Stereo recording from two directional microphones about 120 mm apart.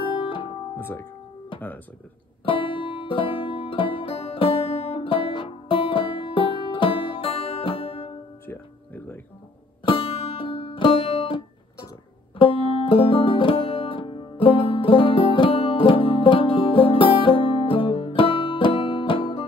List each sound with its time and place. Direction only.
0.0 s music: 45° left (ahead or behind)
0.7 s speech: 20° left (ahead or behind)
2.4 s music: 45° left (ahead or behind)
8.5 s music: 15° left (ahead or behind)
9.8 s music: 55° left (ahead or behind)